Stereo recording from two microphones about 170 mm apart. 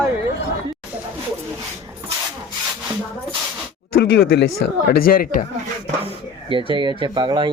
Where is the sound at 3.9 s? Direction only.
70° left (ahead or behind).